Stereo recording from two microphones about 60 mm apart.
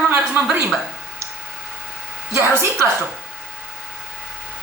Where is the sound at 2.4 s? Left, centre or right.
Right.